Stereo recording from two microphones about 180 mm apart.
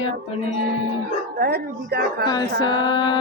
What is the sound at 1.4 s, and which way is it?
Speech, 60° right (ahead or behind).